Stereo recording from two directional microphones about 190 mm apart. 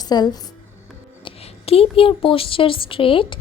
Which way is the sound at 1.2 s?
30° left (ahead or behind).